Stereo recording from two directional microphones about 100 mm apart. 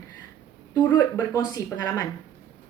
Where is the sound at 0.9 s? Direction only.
35° left (ahead or behind).